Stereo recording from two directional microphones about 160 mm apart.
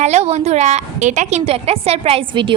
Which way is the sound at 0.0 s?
40° right (ahead or behind).